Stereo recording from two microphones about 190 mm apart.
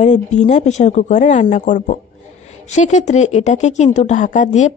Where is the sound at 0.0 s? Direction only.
40° left (ahead or behind).